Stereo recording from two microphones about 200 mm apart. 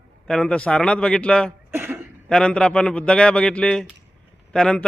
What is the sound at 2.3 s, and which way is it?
A man's voice, 5° left (ahead or behind).